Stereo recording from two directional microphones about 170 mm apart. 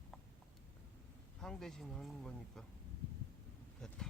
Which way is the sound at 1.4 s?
5° left (ahead or behind).